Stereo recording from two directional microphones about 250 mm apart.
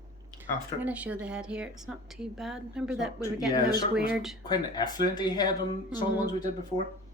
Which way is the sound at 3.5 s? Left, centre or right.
Centre.